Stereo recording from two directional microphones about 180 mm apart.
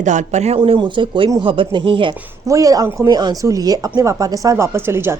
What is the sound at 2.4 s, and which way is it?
Speech, 20° right (ahead or behind).